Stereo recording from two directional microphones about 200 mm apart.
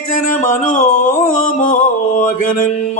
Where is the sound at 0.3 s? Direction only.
35° left (ahead or behind).